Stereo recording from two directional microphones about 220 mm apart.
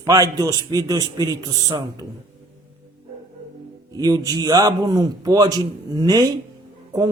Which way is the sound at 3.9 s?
15° right (ahead or behind).